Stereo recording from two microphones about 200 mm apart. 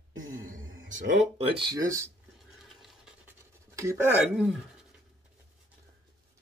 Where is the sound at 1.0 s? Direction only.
35° right (ahead or behind); by 2.1 s 15° right (ahead or behind).